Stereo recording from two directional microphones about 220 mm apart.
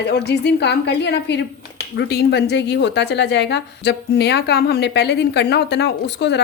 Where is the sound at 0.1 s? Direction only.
50° left (ahead or behind).